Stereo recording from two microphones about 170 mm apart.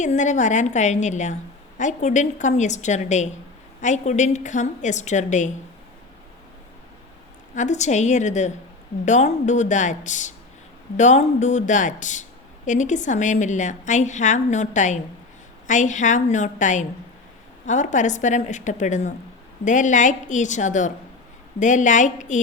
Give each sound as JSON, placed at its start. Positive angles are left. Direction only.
{"t": 0.0, "sound": "a woman's voice", "side_deg": 45}
{"t": 7.5, "sound": "a woman's voice", "side_deg": 45}